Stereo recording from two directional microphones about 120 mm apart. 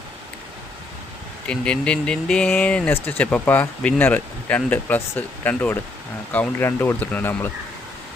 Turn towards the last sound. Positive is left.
turn(degrees=15)  # may be behind; listen again after turning